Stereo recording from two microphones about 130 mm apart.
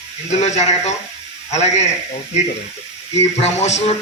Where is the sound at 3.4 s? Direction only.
60° left (ahead or behind).